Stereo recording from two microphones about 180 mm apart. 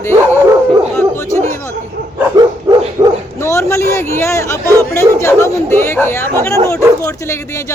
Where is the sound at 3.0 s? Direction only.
25° right (ahead or behind).